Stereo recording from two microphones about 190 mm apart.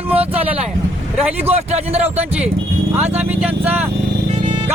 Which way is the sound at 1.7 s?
35° right (ahead or behind).